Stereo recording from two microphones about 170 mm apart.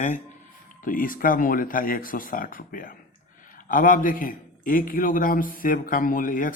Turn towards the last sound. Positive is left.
turn(degrees=55)  # may be behind; listen again after turning